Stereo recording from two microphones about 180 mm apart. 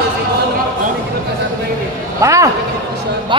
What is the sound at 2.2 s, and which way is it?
Speech, 15° right (ahead or behind).